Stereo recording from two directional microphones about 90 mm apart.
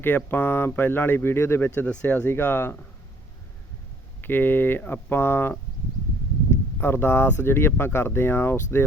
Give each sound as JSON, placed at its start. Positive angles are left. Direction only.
{"t": 0.0, "sound": "speech", "side_deg": 25}
{"t": 4.2, "sound": "speech", "side_deg": 20}